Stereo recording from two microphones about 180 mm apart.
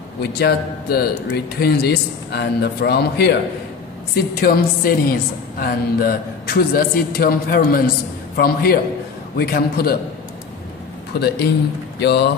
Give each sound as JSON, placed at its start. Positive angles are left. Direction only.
{"t": 0.2, "sound": "a woman's voice", "side_deg": 60}
{"t": 11.1, "sound": "a woman's voice", "side_deg": 65}